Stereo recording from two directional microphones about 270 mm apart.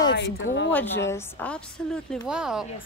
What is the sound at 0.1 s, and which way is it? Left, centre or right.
Speech, left.